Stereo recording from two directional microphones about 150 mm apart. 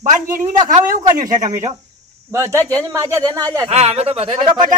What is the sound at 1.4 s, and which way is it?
Speech, 50° right (ahead or behind).